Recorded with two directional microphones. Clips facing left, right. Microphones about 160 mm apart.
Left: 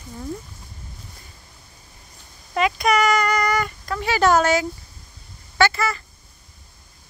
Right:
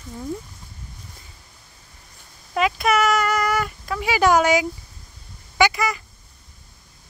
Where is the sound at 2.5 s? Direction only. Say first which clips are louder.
Even; 5° right (ahead or behind).